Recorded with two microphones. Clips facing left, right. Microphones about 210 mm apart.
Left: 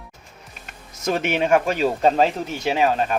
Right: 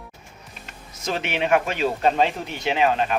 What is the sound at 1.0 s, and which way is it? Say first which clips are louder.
Speech: left 4 dB; 45° left (ahead or behind).